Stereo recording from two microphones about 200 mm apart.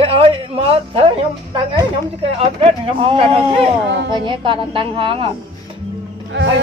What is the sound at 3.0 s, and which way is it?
A woman's voice, 25° right (ahead or behind).